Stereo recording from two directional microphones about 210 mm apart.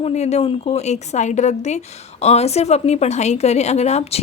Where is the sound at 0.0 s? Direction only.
30° left (ahead or behind).